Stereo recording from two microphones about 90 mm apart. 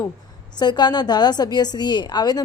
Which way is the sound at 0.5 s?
55° left (ahead or behind).